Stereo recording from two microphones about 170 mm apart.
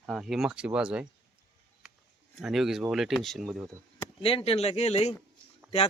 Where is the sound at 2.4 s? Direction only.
Centre (ahead or behind).